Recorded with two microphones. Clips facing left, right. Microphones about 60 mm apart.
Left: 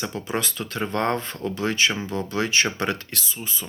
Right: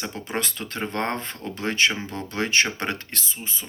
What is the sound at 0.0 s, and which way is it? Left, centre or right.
Speech, right.